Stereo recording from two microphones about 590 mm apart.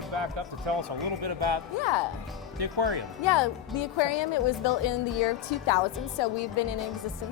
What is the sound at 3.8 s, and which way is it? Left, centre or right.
Speech, left.